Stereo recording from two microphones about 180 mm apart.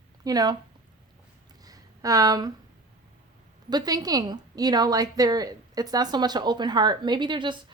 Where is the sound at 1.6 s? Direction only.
20° right (ahead or behind).